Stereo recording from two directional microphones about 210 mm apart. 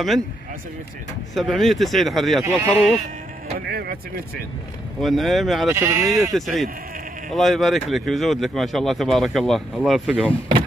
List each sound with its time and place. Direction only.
1.3 s speech: centre (ahead or behind)
3.5 s speech: 45° right (ahead or behind)
5.0 s speech: centre (ahead or behind)
5.7 s speech: 15° right (ahead or behind)
6.3 s speech: centre (ahead or behind)